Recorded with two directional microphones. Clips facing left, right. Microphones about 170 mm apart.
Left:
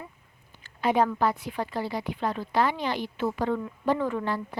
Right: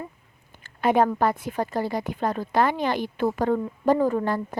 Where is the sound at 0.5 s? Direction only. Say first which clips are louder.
Right 4 dB; 50° right (ahead or behind).